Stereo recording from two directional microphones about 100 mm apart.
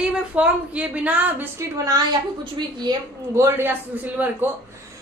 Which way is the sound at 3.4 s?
25° right (ahead or behind).